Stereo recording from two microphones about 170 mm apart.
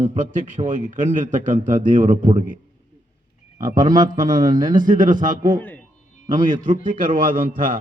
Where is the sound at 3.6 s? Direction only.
50° right (ahead or behind).